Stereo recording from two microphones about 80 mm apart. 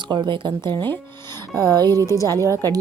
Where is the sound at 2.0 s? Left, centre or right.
Left.